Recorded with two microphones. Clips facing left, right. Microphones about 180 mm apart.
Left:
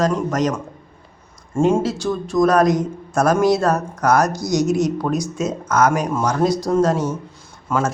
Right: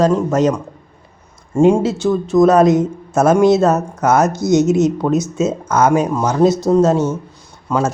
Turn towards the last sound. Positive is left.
turn(degrees=-20)  # may be behind; listen again after turning